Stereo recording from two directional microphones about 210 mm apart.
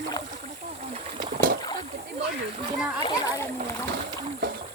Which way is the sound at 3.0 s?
20° left (ahead or behind).